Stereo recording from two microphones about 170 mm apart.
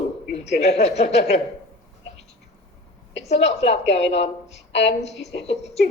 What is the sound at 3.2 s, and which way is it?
A woman's voice, 40° left (ahead or behind).